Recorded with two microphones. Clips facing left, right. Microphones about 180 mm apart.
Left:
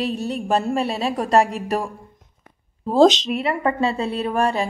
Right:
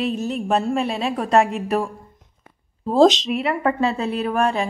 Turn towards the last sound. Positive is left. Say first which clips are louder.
# even
turn(degrees=0)  # may be behind; listen again after turning